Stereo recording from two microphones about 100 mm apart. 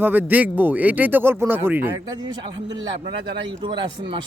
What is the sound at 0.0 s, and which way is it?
Speech, 20° right (ahead or behind).